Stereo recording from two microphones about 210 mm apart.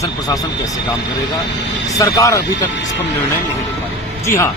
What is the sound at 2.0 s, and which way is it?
Speech, 15° left (ahead or behind).